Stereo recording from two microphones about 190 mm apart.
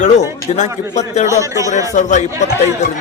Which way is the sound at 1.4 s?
15° right (ahead or behind).